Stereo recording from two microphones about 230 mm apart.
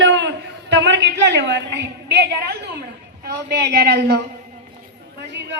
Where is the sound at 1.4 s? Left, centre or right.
Right.